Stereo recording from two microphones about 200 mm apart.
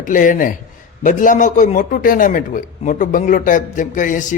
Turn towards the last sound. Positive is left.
turn(degrees=40)  # may be behind; listen again after turning